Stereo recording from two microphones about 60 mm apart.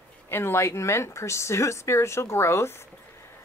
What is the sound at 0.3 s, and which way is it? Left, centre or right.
Speech, left.